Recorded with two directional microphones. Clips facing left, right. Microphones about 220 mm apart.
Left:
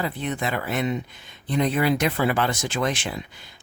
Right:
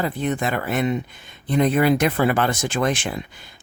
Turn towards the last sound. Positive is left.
turn(degrees=-50)  # may be behind; listen again after turning